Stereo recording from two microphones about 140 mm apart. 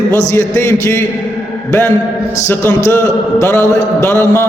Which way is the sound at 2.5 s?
15° left (ahead or behind).